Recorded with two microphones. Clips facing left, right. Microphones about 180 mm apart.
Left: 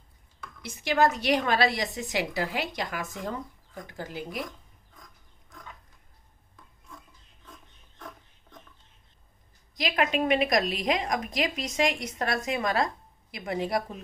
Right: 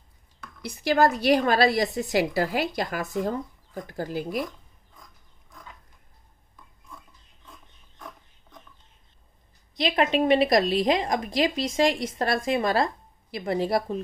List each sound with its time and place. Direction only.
0.6 s a woman's voice: 35° right (ahead or behind)
9.8 s a woman's voice: 30° right (ahead or behind)